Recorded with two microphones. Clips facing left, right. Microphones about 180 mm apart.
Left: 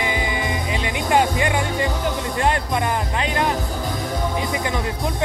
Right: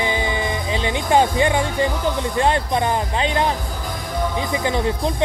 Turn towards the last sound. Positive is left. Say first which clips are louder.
# right 4 dB
turn(degrees=-25)  # may be behind; listen again after turning